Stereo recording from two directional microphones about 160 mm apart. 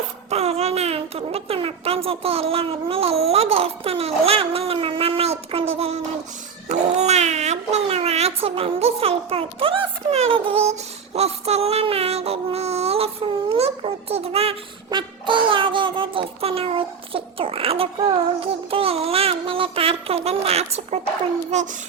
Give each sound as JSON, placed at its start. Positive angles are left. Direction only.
{"t": 0.3, "sound": "speech", "side_deg": -40}
{"t": 6.7, "sound": "a sound", "side_deg": -45}
{"t": 14.8, "sound": "child singing", "side_deg": -30}
{"t": 21.5, "sound": "music", "side_deg": -45}